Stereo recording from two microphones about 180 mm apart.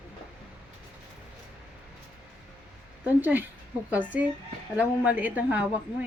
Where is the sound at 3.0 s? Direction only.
10° right (ahead or behind).